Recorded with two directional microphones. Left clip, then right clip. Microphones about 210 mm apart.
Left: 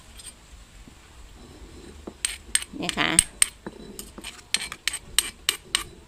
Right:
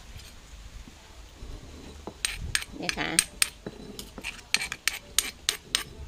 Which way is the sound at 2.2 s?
10° left (ahead or behind).